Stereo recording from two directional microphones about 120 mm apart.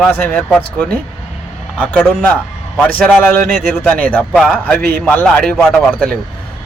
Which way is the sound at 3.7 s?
15° left (ahead or behind).